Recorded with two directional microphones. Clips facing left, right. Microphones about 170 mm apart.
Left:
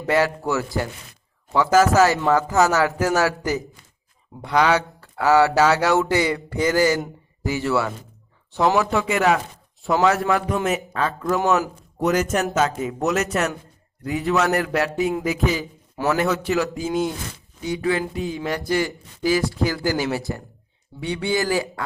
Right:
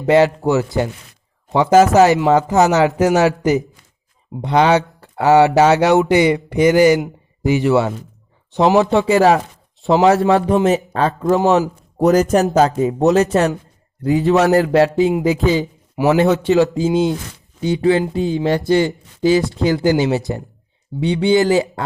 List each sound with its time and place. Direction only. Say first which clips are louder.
0.0 s speech: right 8 dB; 20° right (ahead or behind)
11.9 s a man's voice: right 8 dB; 35° right (ahead or behind)